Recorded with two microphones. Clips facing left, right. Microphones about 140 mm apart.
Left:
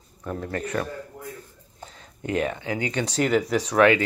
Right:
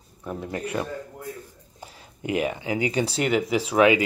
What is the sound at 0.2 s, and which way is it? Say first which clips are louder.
A man's voice: left 1 dB; 10° right (ahead or behind).